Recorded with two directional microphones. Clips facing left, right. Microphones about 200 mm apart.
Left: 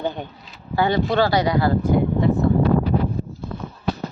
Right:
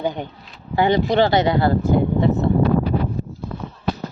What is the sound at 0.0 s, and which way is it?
Speech, 15° right (ahead or behind).